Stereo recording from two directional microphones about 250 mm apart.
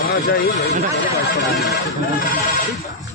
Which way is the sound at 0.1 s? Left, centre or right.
Left.